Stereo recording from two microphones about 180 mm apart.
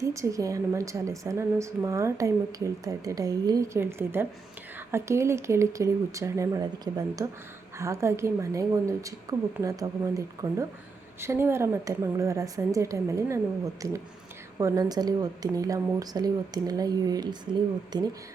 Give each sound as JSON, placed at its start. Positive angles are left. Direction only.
{"t": 0.0, "sound": "a woman's voice", "side_deg": -15}
{"t": 14.6, "sound": "speech", "side_deg": -20}